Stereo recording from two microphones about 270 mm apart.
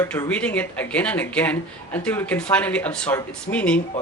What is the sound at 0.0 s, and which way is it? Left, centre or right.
A man's voice, centre.